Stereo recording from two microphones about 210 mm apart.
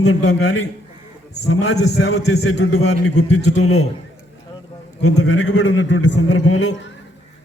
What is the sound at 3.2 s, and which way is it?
Speech, 90° left.